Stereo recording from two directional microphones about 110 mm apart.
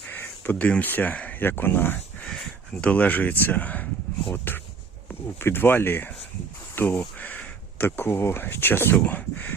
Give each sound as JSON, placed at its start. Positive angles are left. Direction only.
{"t": 0.1, "sound": "speech", "side_deg": 15}